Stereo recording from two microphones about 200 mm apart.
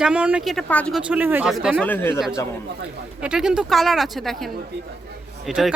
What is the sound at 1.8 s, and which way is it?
Speech, 10° left (ahead or behind).